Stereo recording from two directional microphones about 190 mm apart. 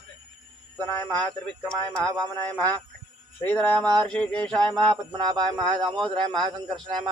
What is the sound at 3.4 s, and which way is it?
Speech, 10° left (ahead or behind).